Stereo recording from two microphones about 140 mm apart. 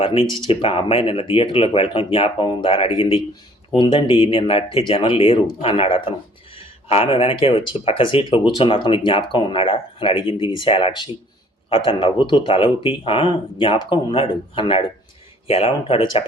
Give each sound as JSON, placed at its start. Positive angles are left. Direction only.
{"t": 0.0, "sound": "speech", "side_deg": 40}